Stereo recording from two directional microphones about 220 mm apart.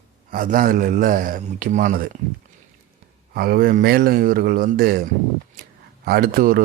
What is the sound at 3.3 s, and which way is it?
Speech, 40° right (ahead or behind).